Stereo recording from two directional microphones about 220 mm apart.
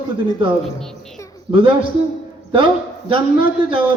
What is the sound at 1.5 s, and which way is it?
Speech, 25° right (ahead or behind).